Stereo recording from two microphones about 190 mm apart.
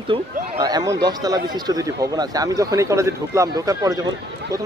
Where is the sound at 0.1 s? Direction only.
20° right (ahead or behind).